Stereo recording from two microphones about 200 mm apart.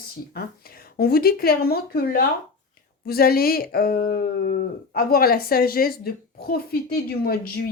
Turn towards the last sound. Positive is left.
turn(degrees=50)  # may be behind; listen again after turning